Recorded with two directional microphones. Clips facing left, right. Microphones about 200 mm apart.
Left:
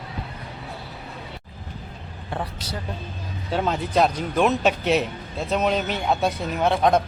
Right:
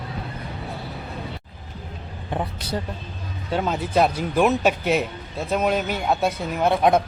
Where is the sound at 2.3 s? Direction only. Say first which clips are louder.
Right 3 dB; 20° right (ahead or behind).